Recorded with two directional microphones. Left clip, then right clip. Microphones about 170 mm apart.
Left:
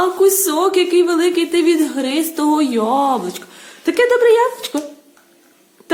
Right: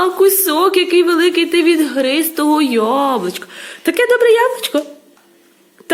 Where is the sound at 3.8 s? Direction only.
10° right (ahead or behind).